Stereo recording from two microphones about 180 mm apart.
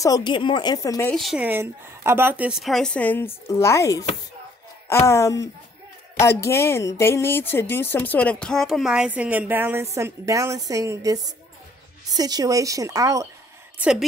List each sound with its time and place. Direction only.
0.0 s speech: 20° left (ahead or behind)
1.1 s a woman's voice: centre (ahead or behind); by 13.3 s 20° right (ahead or behind)
13.7 s a woman's voice: 5° right (ahead or behind)